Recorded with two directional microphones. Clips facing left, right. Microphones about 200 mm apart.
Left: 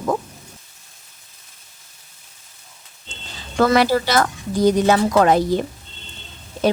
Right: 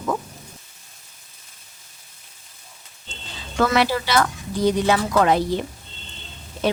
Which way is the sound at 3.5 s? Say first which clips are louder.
Left 4 dB; 40° left (ahead or behind).